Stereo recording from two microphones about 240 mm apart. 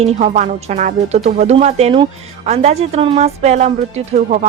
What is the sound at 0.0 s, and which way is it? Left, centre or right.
A woman's voice, right.